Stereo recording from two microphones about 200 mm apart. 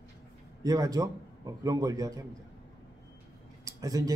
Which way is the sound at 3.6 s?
15° right (ahead or behind).